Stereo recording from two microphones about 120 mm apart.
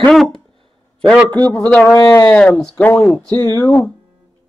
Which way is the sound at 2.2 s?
10° left (ahead or behind).